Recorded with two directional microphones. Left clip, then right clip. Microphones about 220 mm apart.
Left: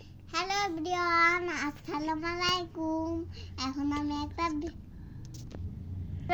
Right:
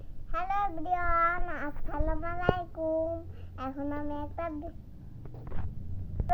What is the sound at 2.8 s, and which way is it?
Child singing, 30° left (ahead or behind).